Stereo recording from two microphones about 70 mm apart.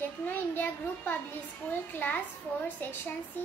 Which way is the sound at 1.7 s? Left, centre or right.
Left.